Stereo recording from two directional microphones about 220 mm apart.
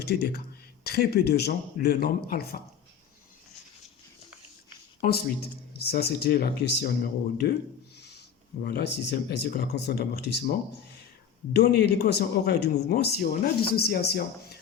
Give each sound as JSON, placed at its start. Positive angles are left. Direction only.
{"t": 0.0, "sound": "speech", "side_deg": 45}
{"t": 4.9, "sound": "speech", "side_deg": 45}
{"t": 7.9, "sound": "a sound", "side_deg": 50}
{"t": 8.6, "sound": "speech", "side_deg": 45}
{"t": 11.6, "sound": "speech", "side_deg": 45}